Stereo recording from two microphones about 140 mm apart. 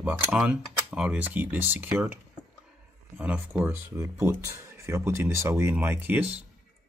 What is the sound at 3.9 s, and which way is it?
Speech, 20° right (ahead or behind).